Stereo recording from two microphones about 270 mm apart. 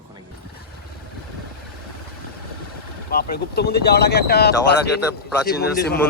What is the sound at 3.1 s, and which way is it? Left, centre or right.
Speech, left.